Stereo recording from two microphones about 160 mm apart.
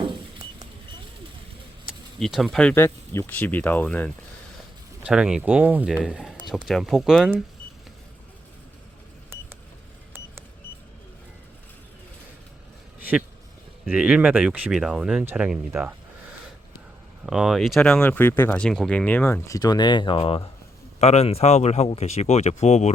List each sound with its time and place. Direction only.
0.0 s patter: 30° right (ahead or behind)
2.1 s speech: centre (ahead or behind)
5.0 s speech: 5° right (ahead or behind)
9.3 s beep: 15° right (ahead or behind)
13.9 s speech: 5° right (ahead or behind)
17.2 s speech: 5° right (ahead or behind); by 20.5 s 30° left (ahead or behind)
21.0 s speech: 40° left (ahead or behind)